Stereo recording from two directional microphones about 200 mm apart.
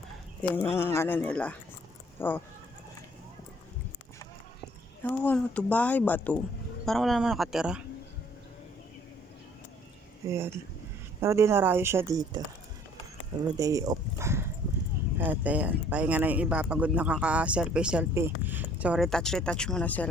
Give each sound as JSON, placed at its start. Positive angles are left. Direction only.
{"t": 0.4, "sound": "speech", "side_deg": 5}
{"t": 5.0, "sound": "speech", "side_deg": 10}
{"t": 10.2, "sound": "speech", "side_deg": -15}
{"t": 13.6, "sound": "speech", "side_deg": -15}